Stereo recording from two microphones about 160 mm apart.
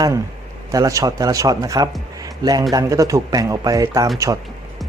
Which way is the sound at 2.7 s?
20° right (ahead or behind).